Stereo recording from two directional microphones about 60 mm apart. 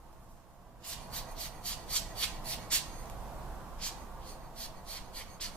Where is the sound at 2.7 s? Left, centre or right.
Centre.